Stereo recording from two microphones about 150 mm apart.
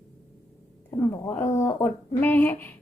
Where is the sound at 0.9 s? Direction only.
15° left (ahead or behind).